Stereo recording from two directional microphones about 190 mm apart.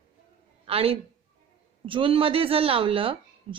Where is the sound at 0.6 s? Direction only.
30° right (ahead or behind).